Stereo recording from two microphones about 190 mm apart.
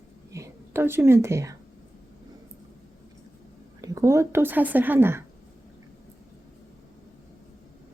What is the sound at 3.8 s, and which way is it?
Speech, 20° right (ahead or behind).